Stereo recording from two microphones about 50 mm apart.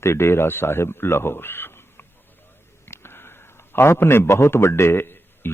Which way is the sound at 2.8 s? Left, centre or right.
Left.